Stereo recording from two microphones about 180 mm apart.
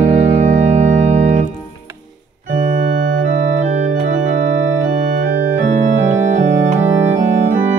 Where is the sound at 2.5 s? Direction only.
45° right (ahead or behind).